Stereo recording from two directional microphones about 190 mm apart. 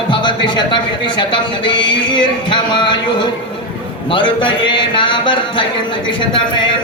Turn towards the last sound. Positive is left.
turn(degrees=25)  # may be behind; listen again after turning